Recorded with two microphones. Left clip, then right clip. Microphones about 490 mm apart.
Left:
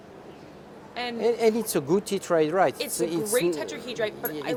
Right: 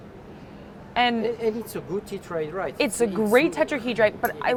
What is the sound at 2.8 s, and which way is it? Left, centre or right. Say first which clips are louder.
A woman's voice: right 5 dB; right.